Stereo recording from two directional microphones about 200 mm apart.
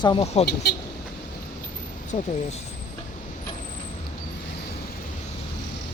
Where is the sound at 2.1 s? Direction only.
40° left (ahead or behind).